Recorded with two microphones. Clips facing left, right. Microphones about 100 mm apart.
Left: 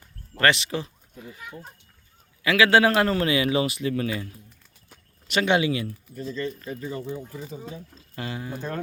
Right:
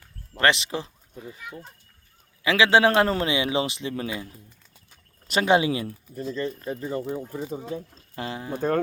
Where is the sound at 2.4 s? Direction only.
25° right (ahead or behind).